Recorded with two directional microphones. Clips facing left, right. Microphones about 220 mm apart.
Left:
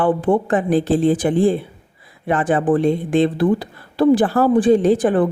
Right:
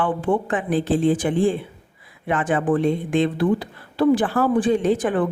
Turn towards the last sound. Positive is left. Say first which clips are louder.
# left 5 dB
turn(degrees=35)  # may be behind; listen again after turning